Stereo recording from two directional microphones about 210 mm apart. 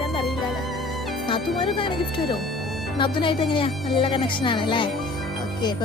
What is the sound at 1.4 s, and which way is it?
Speech, centre (ahead or behind).